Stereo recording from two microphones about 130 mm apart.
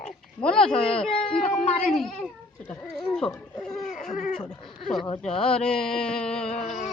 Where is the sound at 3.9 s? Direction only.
70° left (ahead or behind).